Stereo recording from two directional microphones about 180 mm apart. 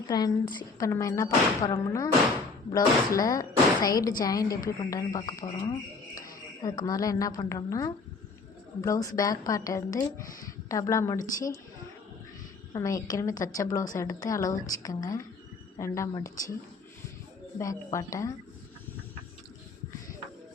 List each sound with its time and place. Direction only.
0.1 s a woman's voice: 20° left (ahead or behind)
12.7 s a woman's voice: 20° left (ahead or behind)
17.6 s a woman's voice: 15° left (ahead or behind)